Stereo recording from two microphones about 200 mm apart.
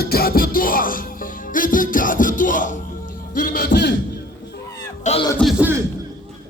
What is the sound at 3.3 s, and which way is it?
Speech, 40° left (ahead or behind).